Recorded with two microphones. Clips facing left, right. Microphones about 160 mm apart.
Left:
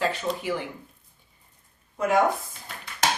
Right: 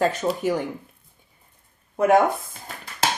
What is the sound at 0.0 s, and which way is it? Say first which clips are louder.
Speech: right 5 dB; 45° right (ahead or behind).